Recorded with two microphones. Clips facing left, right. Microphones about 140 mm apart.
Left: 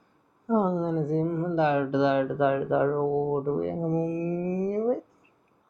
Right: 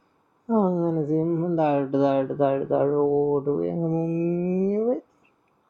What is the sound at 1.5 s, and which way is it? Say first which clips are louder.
Speech: right 1 dB; 35° right (ahead or behind).